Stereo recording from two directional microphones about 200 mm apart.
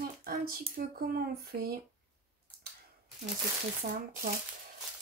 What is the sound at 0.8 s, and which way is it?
Speech, 50° right (ahead or behind).